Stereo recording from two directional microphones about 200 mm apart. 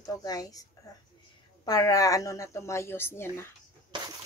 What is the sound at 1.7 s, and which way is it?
Speech, 15° left (ahead or behind).